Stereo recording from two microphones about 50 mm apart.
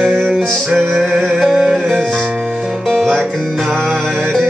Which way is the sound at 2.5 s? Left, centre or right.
Centre.